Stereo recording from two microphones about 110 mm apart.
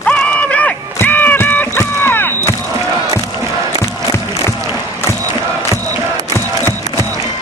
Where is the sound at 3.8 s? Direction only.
25° left (ahead or behind).